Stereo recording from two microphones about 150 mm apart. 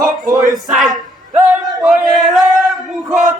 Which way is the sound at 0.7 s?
Centre (ahead or behind).